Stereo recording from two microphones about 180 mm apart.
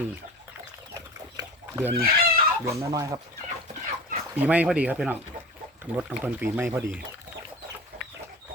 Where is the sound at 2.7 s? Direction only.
15° right (ahead or behind).